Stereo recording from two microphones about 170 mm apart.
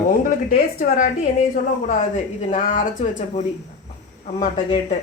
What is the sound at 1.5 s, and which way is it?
Speech, 45° left (ahead or behind).